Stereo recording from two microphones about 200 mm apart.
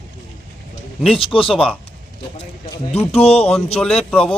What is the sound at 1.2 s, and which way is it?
Speech, 25° left (ahead or behind).